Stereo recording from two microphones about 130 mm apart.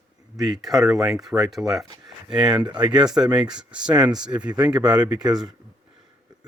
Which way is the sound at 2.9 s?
5° right (ahead or behind).